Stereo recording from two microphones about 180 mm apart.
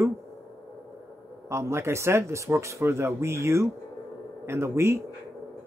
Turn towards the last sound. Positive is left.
turn(degrees=-15)  # may be behind; listen again after turning